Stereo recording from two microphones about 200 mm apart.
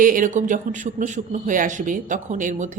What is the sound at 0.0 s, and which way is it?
Speech, 40° right (ahead or behind).